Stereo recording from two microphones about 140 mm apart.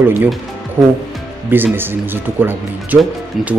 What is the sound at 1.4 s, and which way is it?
Speech, 15° right (ahead or behind).